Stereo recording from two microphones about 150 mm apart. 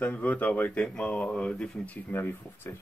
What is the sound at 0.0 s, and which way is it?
Speech, 10° left (ahead or behind).